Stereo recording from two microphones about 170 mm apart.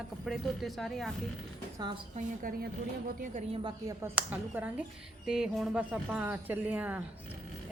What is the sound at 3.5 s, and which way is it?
Speech, 30° right (ahead or behind).